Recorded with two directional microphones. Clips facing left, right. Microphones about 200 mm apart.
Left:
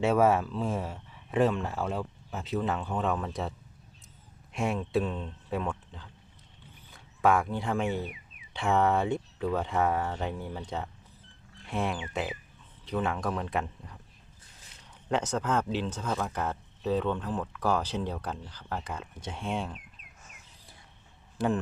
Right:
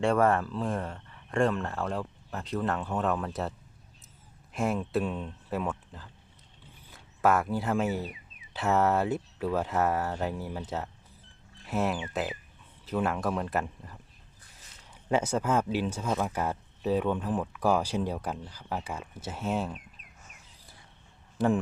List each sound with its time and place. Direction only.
0.0 s speech: 5° left (ahead or behind)
4.5 s speech: centre (ahead or behind)
15.1 s speech: 10° right (ahead or behind)